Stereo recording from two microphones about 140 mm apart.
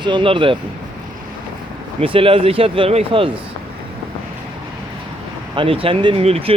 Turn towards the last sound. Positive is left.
turn(degrees=-45)  # may be behind; listen again after turning